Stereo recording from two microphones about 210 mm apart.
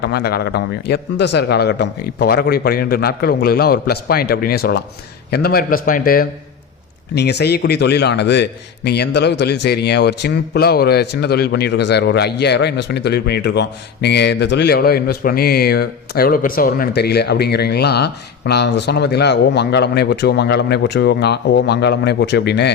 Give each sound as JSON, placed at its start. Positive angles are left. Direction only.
{"t": 0.0, "sound": "a man's voice", "side_deg": 50}
{"t": 7.1, "sound": "a man's voice", "side_deg": 55}